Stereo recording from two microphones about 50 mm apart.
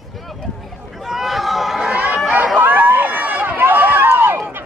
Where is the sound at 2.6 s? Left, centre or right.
Right.